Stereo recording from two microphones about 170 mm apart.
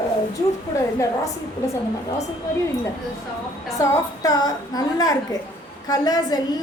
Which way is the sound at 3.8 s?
20° left (ahead or behind).